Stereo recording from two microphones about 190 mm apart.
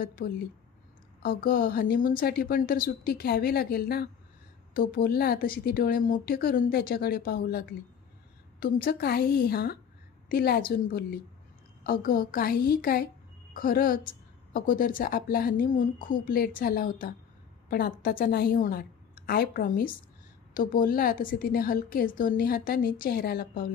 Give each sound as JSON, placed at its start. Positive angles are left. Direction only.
{"t": 0.0, "sound": "a woman's voice", "side_deg": 50}